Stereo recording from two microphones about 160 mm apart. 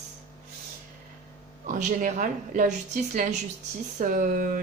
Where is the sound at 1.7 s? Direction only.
55° right (ahead or behind).